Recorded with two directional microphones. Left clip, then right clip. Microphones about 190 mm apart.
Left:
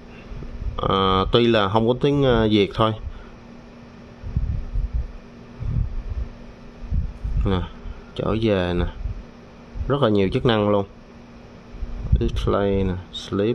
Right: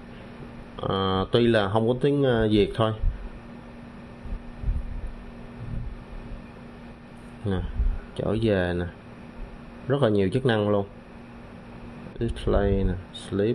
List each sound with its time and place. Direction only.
0.7 s speech: 15° left (ahead or behind)
7.5 s a sound: 15° left (ahead or behind)
8.2 s speech: 10° left (ahead or behind)
12.2 s speech: 10° left (ahead or behind)